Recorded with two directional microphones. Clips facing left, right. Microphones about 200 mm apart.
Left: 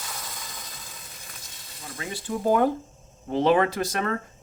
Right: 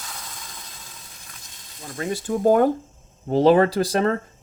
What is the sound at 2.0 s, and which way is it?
Speech, 45° right (ahead or behind).